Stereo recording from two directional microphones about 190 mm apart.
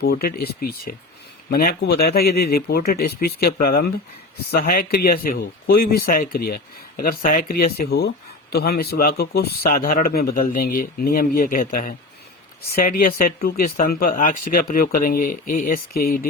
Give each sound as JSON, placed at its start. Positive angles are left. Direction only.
{"t": 0.0, "sound": "speech", "side_deg": 55}